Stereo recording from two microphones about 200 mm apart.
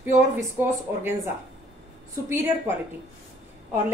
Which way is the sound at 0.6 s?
10° right (ahead or behind).